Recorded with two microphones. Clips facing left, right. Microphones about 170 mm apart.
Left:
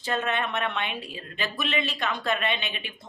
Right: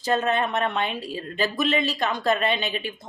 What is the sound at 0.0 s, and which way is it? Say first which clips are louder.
Speech: right 5 dB; 40° right (ahead or behind).